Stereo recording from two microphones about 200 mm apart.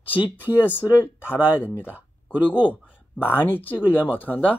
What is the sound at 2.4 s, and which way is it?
Speech, 5° right (ahead or behind).